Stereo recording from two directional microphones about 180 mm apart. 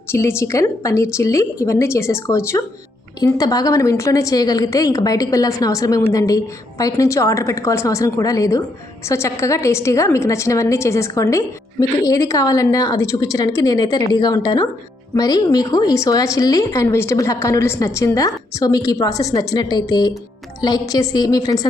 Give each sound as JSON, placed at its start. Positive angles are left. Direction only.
{"t": 0.1, "sound": "a woman's voice", "side_deg": 15}